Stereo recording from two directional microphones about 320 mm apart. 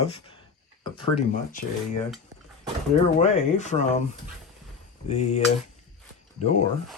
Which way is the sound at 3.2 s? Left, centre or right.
Left.